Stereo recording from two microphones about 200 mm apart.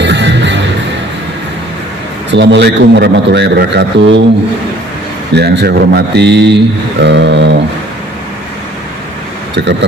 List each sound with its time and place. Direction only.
0.0 s music: 60° right (ahead or behind)
2.3 s a man's voice: 60° right (ahead or behind)
5.3 s a man's voice: 55° right (ahead or behind)
9.6 s a man's voice: 60° right (ahead or behind)